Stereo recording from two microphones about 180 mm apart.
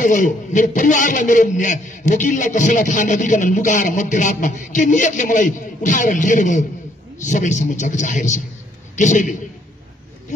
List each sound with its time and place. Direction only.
0.0 s a man's voice: 45° left (ahead or behind)